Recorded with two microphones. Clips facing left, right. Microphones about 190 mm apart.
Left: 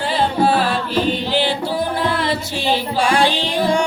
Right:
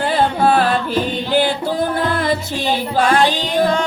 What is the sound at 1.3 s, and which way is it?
Singing, 50° right (ahead or behind).